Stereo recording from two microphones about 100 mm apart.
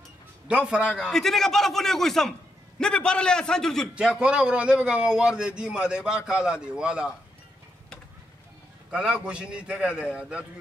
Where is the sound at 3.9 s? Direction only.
10° right (ahead or behind).